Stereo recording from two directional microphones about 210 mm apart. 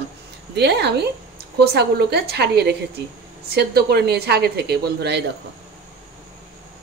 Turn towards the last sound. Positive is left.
turn(degrees=-50)  # may be behind; listen again after turning